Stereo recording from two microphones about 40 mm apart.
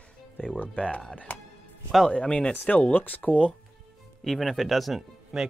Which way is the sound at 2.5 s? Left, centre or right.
Left.